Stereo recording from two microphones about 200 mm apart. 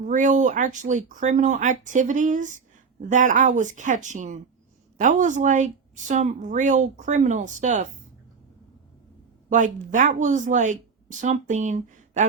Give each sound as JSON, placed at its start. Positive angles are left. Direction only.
{"t": 0.0, "sound": "speech", "side_deg": -40}
{"t": 9.5, "sound": "speech", "side_deg": -40}